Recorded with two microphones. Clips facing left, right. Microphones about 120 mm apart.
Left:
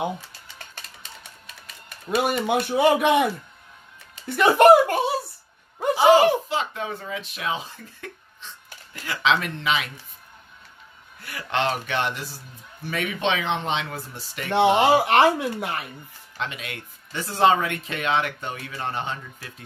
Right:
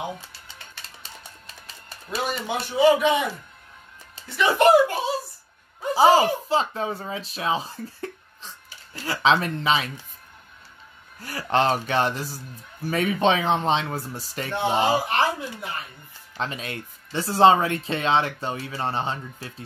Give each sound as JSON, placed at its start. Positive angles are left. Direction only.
{"t": 0.0, "sound": "typing", "side_deg": 50}
{"t": 2.0, "sound": "a man's voice", "side_deg": 55}
{"t": 4.4, "sound": "a man's voice", "side_deg": 55}
{"t": 6.5, "sound": "speech", "side_deg": -35}
{"t": 11.1, "sound": "speech", "side_deg": -40}
{"t": 14.5, "sound": "speech", "side_deg": 75}
{"t": 16.3, "sound": "speech", "side_deg": -35}